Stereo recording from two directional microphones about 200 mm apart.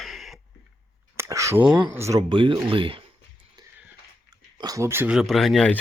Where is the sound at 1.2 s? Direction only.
15° right (ahead or behind).